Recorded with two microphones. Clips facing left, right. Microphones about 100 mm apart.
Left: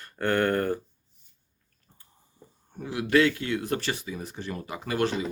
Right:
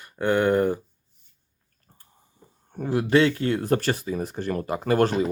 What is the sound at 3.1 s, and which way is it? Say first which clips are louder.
Speech: right 2 dB; 30° right (ahead or behind).